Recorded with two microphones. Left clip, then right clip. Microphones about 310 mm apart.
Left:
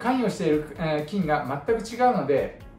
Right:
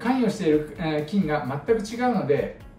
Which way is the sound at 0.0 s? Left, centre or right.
Centre.